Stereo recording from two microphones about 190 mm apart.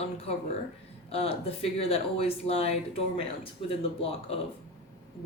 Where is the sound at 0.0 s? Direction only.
30° left (ahead or behind).